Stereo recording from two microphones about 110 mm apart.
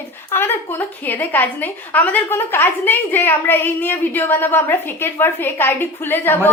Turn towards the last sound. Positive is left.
turn(degrees=20)  # may be behind; listen again after turning